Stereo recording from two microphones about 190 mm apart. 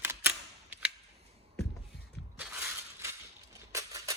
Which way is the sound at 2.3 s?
5° right (ahead or behind).